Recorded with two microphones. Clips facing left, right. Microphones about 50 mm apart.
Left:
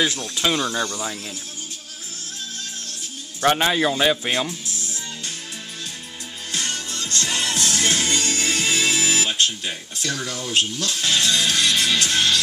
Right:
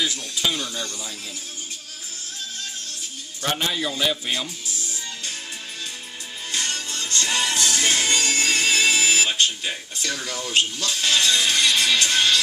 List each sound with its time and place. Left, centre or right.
0.0 s a man's voice: left
3.4 s a man's voice: left
6.5 s music: centre
11.1 s music: centre